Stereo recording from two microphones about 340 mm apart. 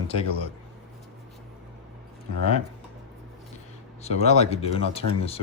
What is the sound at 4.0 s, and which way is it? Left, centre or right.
Speech, centre.